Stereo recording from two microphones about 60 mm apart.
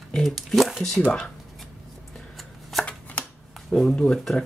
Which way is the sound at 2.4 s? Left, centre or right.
Centre.